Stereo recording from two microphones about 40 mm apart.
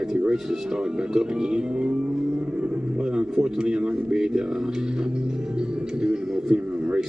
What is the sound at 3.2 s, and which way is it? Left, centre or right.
Speech, centre.